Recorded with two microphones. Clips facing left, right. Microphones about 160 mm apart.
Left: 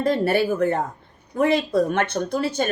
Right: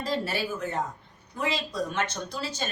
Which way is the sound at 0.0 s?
55° left (ahead or behind).